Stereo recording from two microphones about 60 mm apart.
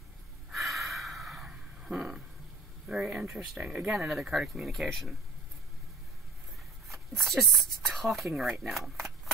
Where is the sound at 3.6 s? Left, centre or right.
Centre.